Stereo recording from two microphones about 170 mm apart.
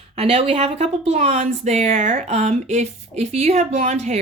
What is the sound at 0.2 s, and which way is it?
A woman's voice, 40° right (ahead or behind).